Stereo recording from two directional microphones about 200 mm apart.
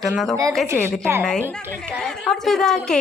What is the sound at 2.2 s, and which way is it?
Speech, centre (ahead or behind).